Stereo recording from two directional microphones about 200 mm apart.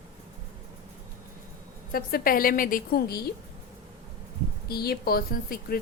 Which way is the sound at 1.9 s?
45° left (ahead or behind).